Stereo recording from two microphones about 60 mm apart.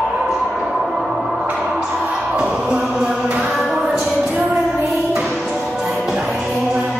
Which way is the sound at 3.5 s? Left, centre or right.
Centre.